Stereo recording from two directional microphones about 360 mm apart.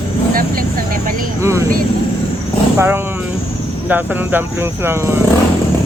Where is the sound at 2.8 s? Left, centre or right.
Centre.